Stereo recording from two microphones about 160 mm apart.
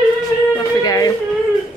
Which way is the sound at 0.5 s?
25° left (ahead or behind).